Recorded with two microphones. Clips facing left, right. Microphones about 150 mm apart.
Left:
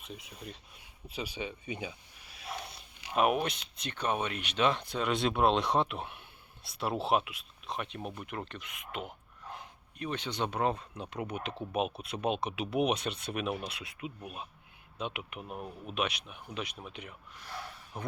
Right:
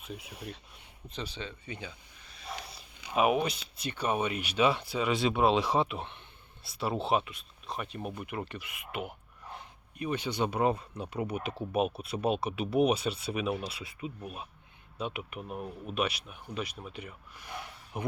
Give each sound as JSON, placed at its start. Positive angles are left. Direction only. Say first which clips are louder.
{"t": 0.0, "sound": "speech", "louder": "right 3 dB", "side_deg": 0}
{"t": 0.3, "sound": "speech", "louder": "right 3 dB", "side_deg": -75}
{"t": 1.0, "sound": "speech", "louder": "left 2 dB", "side_deg": 10}
{"t": 17.9, "sound": "speech", "louder": "right 5 dB", "side_deg": -15}